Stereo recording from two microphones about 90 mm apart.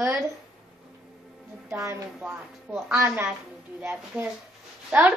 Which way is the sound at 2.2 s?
5° right (ahead or behind).